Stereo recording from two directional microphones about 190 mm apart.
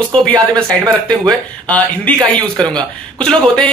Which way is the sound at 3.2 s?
5° left (ahead or behind).